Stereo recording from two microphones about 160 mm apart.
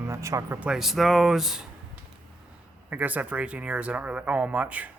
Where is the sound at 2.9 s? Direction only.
10° right (ahead or behind).